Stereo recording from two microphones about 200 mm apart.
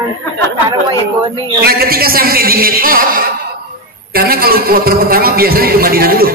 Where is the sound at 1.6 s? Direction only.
50° right (ahead or behind).